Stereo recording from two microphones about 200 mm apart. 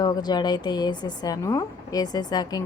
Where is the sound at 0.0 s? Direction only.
20° left (ahead or behind).